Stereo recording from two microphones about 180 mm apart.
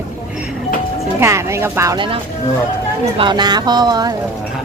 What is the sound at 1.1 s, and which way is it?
Speech, 15° right (ahead or behind).